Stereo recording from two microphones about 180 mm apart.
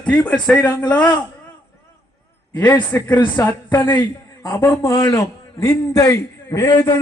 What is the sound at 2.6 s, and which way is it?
A man's voice, 10° left (ahead or behind).